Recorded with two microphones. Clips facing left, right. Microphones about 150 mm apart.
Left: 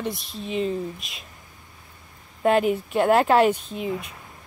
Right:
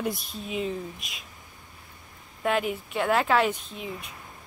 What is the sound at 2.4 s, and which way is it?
A woman's voice, 40° left (ahead or behind).